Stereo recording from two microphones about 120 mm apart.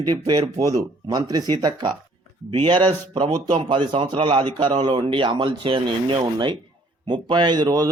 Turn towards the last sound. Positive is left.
turn(degrees=-30)  # may be behind; listen again after turning